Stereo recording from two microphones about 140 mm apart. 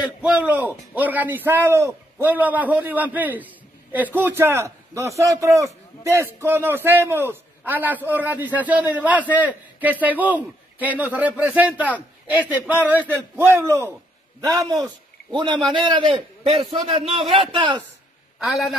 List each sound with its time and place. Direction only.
0.0 s a man's voice: 10° right (ahead or behind); by 16.6 s 45° right (ahead or behind)
17.1 s a man's voice: centre (ahead or behind)
17.5 s a man's voice: 35° right (ahead or behind)
18.4 s a man's voice: centre (ahead or behind)